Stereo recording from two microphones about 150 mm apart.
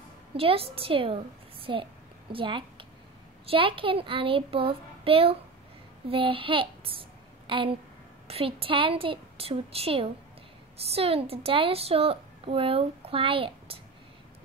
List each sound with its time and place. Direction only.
0.3 s a woman's voice: 40° right (ahead or behind)